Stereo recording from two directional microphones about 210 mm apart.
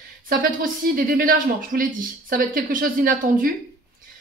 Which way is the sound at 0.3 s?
40° right (ahead or behind).